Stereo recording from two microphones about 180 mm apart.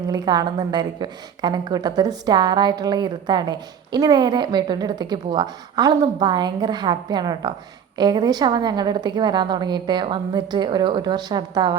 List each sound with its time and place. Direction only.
0.1 s a woman's voice: 20° right (ahead or behind)